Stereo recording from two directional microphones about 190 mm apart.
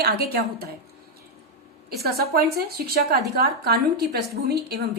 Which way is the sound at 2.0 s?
55° right (ahead or behind).